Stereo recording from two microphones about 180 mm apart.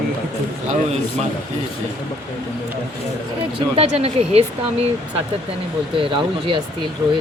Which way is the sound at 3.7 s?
35° right (ahead or behind).